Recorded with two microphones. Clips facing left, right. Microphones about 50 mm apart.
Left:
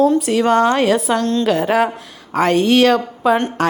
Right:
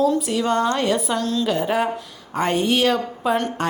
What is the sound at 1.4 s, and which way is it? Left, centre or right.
Speech, left.